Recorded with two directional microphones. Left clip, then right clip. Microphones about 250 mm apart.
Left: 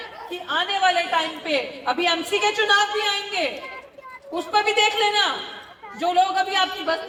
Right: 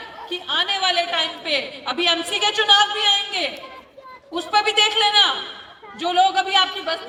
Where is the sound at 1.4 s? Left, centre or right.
Right.